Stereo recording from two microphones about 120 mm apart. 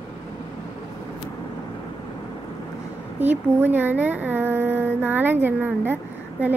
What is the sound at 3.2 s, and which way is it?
Speech, 15° right (ahead or behind).